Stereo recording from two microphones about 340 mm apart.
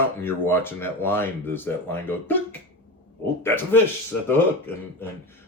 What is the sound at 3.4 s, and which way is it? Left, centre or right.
Speech, centre.